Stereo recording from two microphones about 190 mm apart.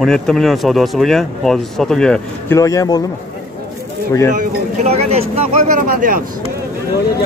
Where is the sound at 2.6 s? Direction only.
15° left (ahead or behind).